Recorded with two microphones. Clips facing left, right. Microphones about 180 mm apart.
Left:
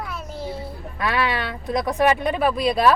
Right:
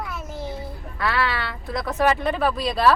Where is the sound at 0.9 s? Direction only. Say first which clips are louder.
Left 1 dB; 20° left (ahead or behind).